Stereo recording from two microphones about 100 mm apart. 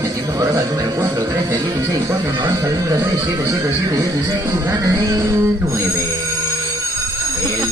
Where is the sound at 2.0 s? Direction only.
45° right (ahead or behind).